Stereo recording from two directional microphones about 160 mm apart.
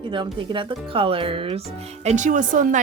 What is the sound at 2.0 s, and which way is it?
Speech, 45° right (ahead or behind).